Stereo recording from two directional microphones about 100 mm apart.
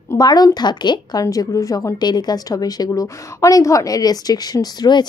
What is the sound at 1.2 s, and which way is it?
A woman's voice, 35° left (ahead or behind).